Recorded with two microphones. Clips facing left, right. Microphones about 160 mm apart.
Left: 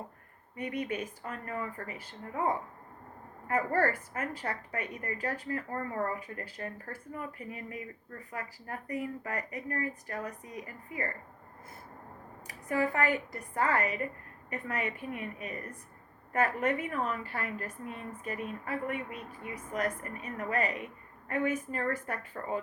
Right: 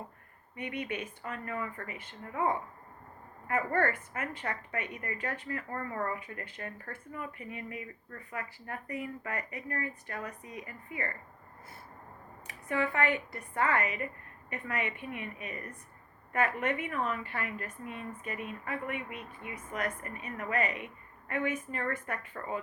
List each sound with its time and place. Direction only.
0.5 s a woman's voice: 40° left (ahead or behind)
12.6 s a woman's voice: 35° left (ahead or behind)